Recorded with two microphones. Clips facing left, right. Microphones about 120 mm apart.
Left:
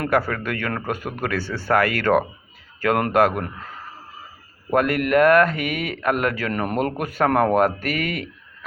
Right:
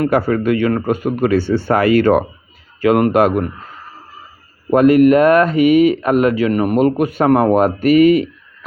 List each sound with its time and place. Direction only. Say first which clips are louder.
0.1 s speech: right 7 dB; 25° right (ahead or behind)
4.7 s speech: right 9 dB; 20° right (ahead or behind)